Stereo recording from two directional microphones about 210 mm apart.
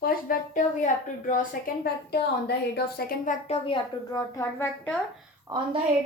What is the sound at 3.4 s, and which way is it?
Speech, 30° left (ahead or behind).